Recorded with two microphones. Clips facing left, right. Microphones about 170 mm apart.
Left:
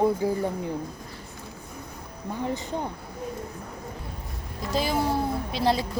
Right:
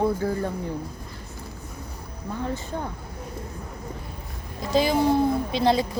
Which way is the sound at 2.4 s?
20° left (ahead or behind).